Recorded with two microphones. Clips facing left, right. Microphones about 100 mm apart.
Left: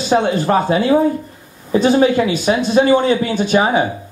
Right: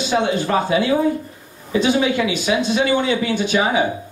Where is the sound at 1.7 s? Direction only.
40° left (ahead or behind).